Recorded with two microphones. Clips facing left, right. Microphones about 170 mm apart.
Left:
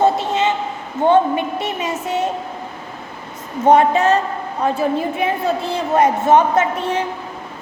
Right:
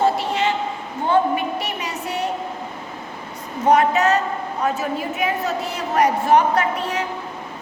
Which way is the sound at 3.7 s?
30° left (ahead or behind).